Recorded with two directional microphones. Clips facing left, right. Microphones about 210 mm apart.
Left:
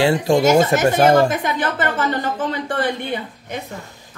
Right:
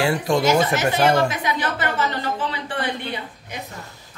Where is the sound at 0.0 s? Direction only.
25° left (ahead or behind).